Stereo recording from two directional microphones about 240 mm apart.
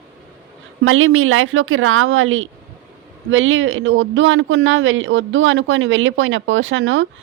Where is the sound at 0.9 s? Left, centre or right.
Right.